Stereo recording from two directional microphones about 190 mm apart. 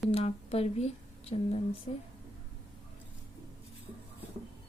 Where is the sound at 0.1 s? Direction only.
35° left (ahead or behind).